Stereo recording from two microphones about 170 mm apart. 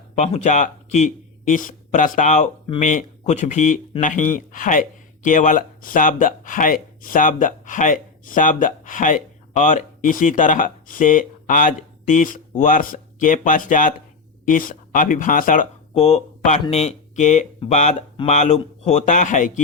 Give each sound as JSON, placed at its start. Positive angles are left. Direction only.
{"t": 0.2, "sound": "a man's voice", "side_deg": 40}
{"t": 16.0, "sound": "speech", "side_deg": 40}